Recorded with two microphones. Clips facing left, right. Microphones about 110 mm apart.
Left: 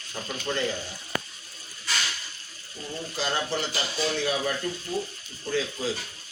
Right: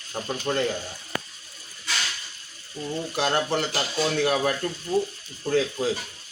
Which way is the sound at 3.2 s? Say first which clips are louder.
Right 4 dB; 60° right (ahead or behind).